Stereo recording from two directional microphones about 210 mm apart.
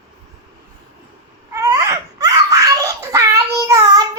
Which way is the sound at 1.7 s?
15° right (ahead or behind).